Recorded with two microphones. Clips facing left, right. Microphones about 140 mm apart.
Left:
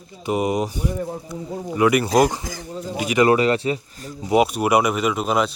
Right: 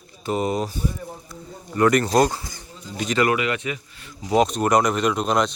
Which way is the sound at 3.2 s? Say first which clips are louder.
Left 7 dB; 35° left (ahead or behind).